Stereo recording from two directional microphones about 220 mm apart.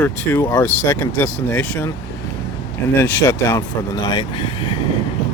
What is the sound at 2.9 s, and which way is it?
Speech, 10° left (ahead or behind).